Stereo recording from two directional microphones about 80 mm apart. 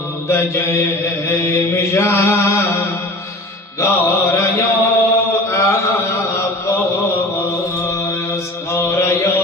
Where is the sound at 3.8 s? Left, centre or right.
Left.